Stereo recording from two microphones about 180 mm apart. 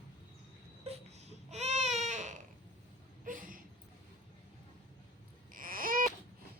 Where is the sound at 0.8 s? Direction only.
35° right (ahead or behind).